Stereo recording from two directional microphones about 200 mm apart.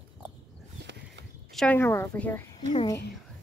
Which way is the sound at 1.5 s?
5° left (ahead or behind).